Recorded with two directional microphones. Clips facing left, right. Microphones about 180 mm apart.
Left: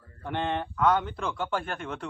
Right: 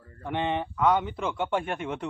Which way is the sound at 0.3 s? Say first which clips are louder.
Right 1 dB; 5° right (ahead or behind).